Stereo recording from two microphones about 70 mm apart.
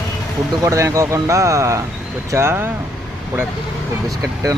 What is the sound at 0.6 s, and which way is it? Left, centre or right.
Speech, right.